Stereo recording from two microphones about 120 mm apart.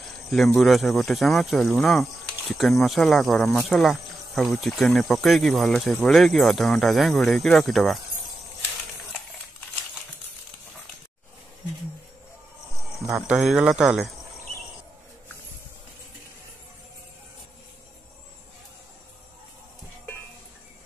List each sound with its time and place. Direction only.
0.6 s speech: centre (ahead or behind)
13.3 s speech: 5° right (ahead or behind)